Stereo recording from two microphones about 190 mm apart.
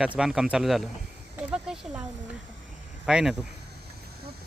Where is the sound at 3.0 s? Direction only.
5° right (ahead or behind).